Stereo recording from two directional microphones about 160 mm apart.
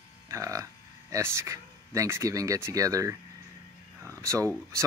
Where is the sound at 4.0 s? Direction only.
15° right (ahead or behind).